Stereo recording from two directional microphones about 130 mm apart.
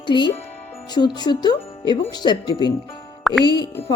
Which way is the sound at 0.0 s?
35° left (ahead or behind).